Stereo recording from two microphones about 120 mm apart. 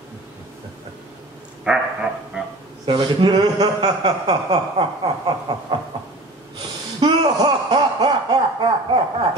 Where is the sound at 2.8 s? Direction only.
40° right (ahead or behind).